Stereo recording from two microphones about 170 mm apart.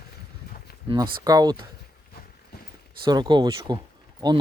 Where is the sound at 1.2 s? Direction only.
20° right (ahead or behind).